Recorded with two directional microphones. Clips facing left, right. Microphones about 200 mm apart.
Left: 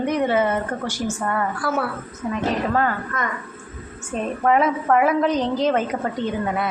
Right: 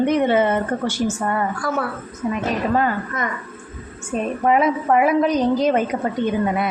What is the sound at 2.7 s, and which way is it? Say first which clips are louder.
A woman's voice: right 2 dB; 15° right (ahead or behind).